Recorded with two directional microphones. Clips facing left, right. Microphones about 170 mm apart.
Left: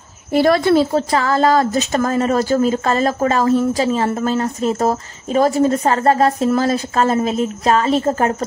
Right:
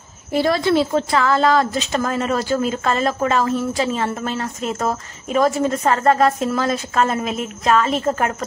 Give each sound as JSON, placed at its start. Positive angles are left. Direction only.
{"t": 0.4, "sound": "a woman's voice", "side_deg": 50}